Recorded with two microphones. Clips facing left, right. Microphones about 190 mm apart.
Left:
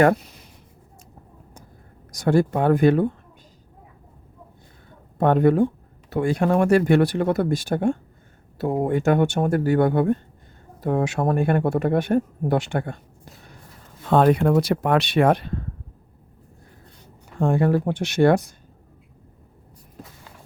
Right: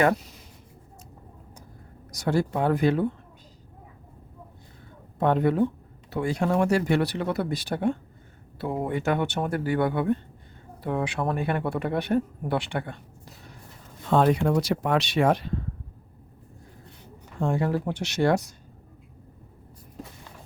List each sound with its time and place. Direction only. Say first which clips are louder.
2.1 s speech: left 5 dB; 55° left (ahead or behind)
5.1 s speech: left 5 dB; 55° left (ahead or behind)
14.1 s speech: left 4 dB; 60° left (ahead or behind)
17.4 s speech: left 6 dB; 55° left (ahead or behind)